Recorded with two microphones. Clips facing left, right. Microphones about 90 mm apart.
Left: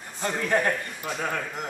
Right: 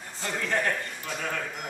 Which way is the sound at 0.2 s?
15° left (ahead or behind).